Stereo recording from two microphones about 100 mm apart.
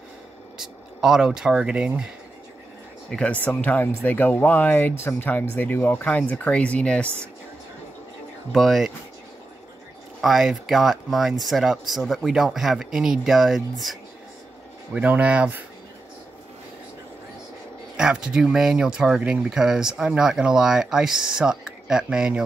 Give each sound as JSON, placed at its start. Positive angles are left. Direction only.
{"t": 0.6, "sound": "speech", "side_deg": -5}
{"t": 3.1, "sound": "speech", "side_deg": 10}
{"t": 8.5, "sound": "speech", "side_deg": 0}
{"t": 10.2, "sound": "speech", "side_deg": -5}
{"t": 15.0, "sound": "speech", "side_deg": -15}
{"t": 17.9, "sound": "speech", "side_deg": -10}